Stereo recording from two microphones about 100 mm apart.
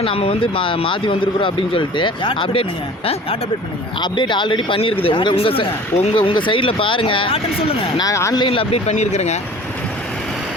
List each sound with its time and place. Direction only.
0.0 s speech: 75° left (ahead or behind)
4.0 s speech: 50° left (ahead or behind)
8.1 s speech: 30° left (ahead or behind)
8.4 s speech: 60° left (ahead or behind); by 9.4 s 90° left